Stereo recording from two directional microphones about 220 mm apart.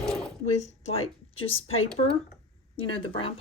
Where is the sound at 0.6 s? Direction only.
30° left (ahead or behind).